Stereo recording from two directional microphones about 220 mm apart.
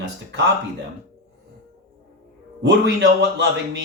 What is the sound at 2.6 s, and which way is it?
Speech, 50° right (ahead or behind).